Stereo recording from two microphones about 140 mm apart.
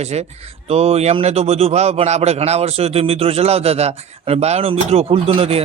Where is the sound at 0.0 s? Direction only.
50° right (ahead or behind).